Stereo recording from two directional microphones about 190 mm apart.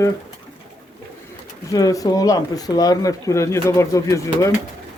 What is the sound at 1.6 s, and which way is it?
Speech, 20° left (ahead or behind).